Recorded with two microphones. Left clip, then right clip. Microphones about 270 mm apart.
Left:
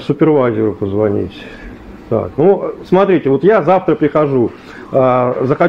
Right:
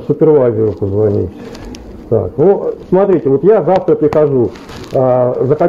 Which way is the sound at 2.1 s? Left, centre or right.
Left.